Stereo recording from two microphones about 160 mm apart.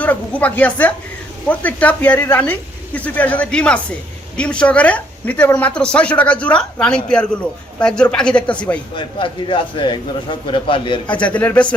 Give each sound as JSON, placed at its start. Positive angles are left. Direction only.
{"t": 0.0, "sound": "a woman's voice", "side_deg": 10}
{"t": 9.0, "sound": "speech", "side_deg": 30}
{"t": 11.0, "sound": "a woman's voice", "side_deg": 10}